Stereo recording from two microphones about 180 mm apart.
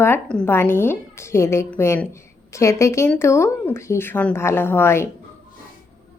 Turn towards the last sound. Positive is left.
turn(degrees=15)  # may be behind; listen again after turning